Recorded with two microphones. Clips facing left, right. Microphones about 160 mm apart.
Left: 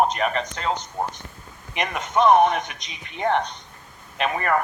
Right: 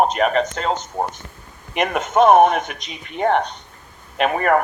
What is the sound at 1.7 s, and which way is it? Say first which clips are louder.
Speech: right 6 dB; 55° right (ahead or behind).